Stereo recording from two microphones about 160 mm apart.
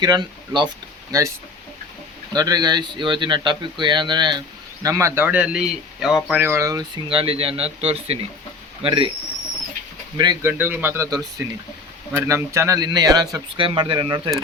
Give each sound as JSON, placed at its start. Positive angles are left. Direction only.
{"t": 0.0, "sound": "speech", "side_deg": -25}
{"t": 2.3, "sound": "speech", "side_deg": -25}
{"t": 6.4, "sound": "speech", "side_deg": -20}
{"t": 10.4, "sound": "speech", "side_deg": -10}